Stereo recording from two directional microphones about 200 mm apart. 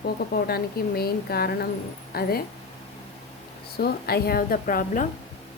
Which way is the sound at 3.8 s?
50° left (ahead or behind).